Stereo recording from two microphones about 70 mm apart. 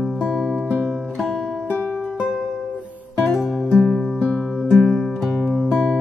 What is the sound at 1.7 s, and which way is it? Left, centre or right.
Music, centre.